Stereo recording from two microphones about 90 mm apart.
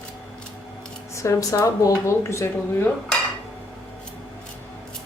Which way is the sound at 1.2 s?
35° left (ahead or behind).